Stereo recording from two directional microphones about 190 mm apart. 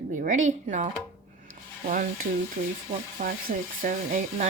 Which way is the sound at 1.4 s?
45° right (ahead or behind).